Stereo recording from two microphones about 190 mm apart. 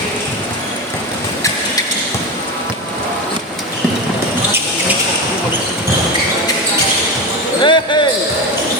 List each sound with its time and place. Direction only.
7.6 s basketball bounce: 25° left (ahead or behind)